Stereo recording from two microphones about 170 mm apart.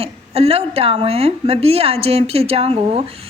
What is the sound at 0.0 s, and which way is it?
A woman's voice, 35° right (ahead or behind).